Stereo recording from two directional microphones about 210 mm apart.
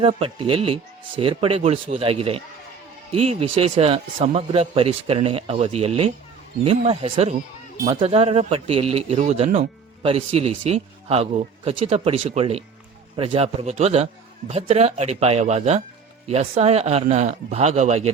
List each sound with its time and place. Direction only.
0.0 s a man's voice: 25° right (ahead or behind)